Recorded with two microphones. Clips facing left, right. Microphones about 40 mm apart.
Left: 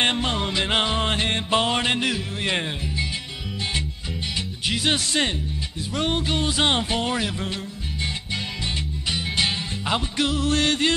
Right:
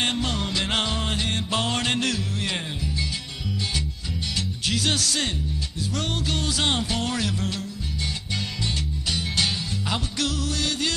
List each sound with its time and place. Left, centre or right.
0.0 s music: left
1.0 s music: left; by 2.5 s centre
4.4 s music: centre
9.1 s music: left
10.5 s yodeling: left